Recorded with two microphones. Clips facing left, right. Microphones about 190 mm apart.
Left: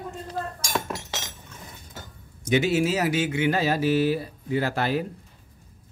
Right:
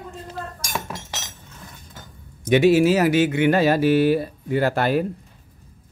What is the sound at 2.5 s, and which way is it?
Speech, 60° right (ahead or behind).